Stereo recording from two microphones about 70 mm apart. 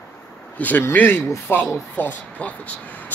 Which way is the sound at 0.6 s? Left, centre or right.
Left.